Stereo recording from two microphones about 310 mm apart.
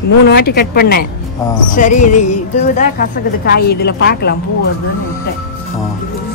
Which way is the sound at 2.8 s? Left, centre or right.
Left.